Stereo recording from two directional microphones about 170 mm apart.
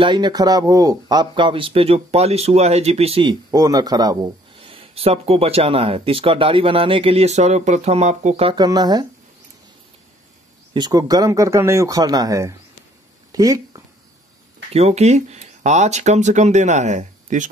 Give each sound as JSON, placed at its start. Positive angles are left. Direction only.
{"t": 0.0, "sound": "speech", "side_deg": -25}
{"t": 4.6, "sound": "speech", "side_deg": -35}
{"t": 8.5, "sound": "speech", "side_deg": -25}
{"t": 10.7, "sound": "speech", "side_deg": -25}
{"t": 13.3, "sound": "a sound", "side_deg": -20}
{"t": 14.7, "sound": "speech", "side_deg": -40}